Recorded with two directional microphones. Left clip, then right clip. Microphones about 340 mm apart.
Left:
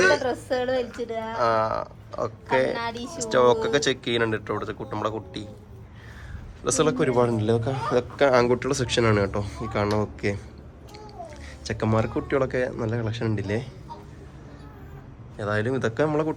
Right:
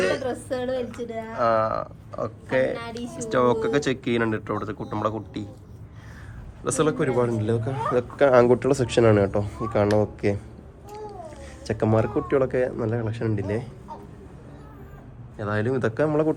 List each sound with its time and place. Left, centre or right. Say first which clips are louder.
0.2 s speech: left 2 dB; centre
2.7 s speech: left 3 dB; centre
3.2 s a man's voice: left 2 dB; centre
6.7 s a man's voice: left 1 dB; centre
11.6 s a man's voice: right 3 dB; centre
15.4 s a man's voice: even; centre